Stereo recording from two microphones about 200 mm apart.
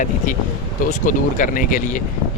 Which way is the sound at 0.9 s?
40° left (ahead or behind).